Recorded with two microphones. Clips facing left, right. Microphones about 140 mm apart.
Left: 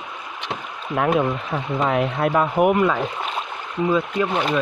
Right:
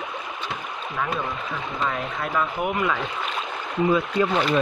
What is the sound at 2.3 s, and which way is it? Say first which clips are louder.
Speech: left 7 dB; 50° left (ahead or behind).